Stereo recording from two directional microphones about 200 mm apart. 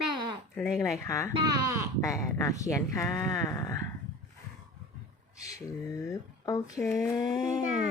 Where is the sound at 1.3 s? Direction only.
20° right (ahead or behind).